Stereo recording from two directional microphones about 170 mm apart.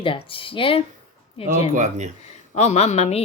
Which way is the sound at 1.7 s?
45° right (ahead or behind).